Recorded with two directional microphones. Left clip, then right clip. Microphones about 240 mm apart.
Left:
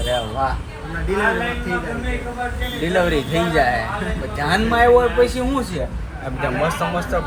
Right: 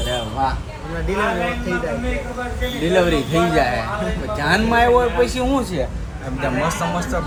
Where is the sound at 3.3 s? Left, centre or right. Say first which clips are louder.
Left 1 dB; centre.